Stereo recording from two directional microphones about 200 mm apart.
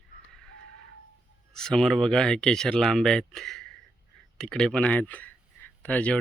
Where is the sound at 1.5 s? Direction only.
Centre (ahead or behind).